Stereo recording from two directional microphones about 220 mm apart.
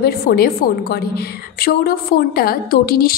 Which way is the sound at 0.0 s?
45° left (ahead or behind).